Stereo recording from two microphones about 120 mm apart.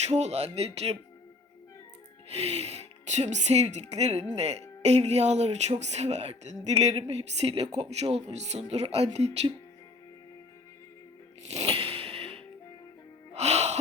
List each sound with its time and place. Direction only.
0.1 s speech: 65° right (ahead or behind)
2.3 s speech: 60° right (ahead or behind)
11.7 s a sound: 50° right (ahead or behind)
13.3 s music: 60° right (ahead or behind)